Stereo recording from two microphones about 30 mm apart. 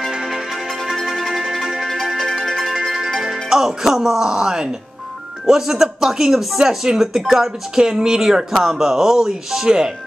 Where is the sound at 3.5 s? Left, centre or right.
Centre.